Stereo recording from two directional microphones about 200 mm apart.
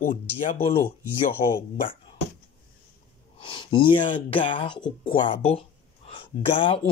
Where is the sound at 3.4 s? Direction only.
25° left (ahead or behind).